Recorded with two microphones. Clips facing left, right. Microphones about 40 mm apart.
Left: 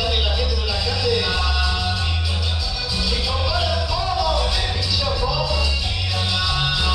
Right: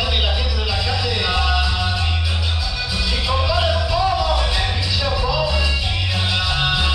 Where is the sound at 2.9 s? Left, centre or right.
Right.